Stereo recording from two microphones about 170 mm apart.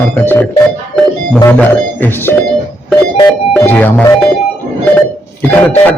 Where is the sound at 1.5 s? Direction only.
10° left (ahead or behind).